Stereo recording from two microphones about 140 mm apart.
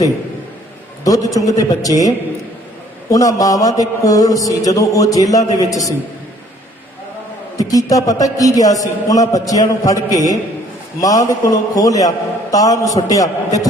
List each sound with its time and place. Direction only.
1.0 s a man's voice: 25° left (ahead or behind)
7.5 s a man's voice: 25° left (ahead or behind)